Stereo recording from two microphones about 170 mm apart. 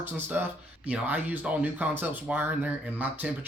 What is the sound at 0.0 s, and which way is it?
Speech, 10° right (ahead or behind).